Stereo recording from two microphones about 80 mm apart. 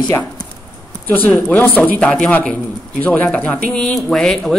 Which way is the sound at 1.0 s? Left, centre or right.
Left.